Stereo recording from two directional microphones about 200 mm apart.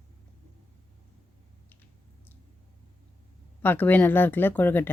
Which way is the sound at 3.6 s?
10° left (ahead or behind).